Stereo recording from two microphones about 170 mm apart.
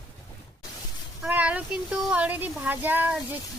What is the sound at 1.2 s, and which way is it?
Speech, 10° right (ahead or behind).